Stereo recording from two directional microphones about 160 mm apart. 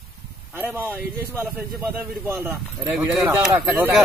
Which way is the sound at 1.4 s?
10° right (ahead or behind).